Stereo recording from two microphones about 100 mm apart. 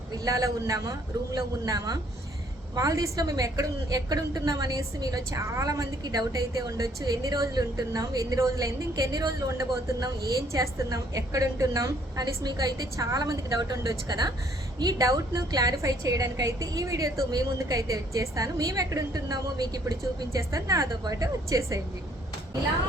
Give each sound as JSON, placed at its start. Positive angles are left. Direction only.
{"t": 0.1, "sound": "a woman's voice", "side_deg": -35}